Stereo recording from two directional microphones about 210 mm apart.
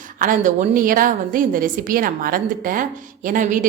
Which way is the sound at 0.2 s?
40° right (ahead or behind).